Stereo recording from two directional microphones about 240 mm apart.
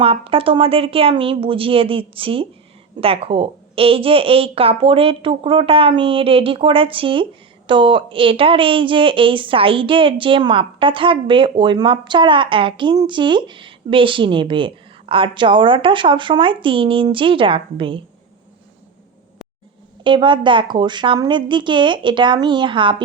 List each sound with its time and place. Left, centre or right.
0.0 s speech: right
20.1 s speech: centre